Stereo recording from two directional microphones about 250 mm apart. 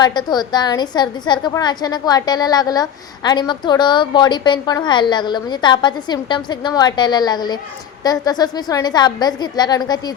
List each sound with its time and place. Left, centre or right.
0.0 s a woman's voice: centre